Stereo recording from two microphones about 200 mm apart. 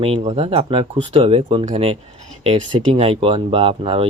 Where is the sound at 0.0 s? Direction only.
30° right (ahead or behind).